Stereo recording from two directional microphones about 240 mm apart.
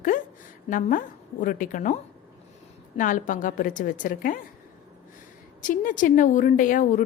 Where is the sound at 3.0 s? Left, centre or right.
Left.